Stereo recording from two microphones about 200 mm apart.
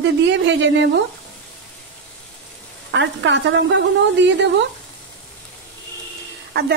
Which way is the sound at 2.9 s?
65° right (ahead or behind).